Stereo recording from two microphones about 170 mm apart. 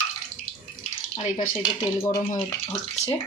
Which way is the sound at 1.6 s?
20° left (ahead or behind).